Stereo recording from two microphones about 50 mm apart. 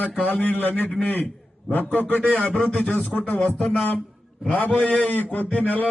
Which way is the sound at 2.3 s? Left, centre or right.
Left.